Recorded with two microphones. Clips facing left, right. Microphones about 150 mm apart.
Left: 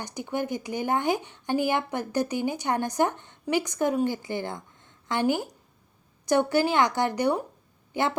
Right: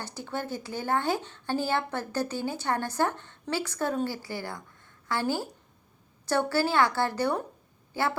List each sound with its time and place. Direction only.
0.0 s speech: 15° left (ahead or behind)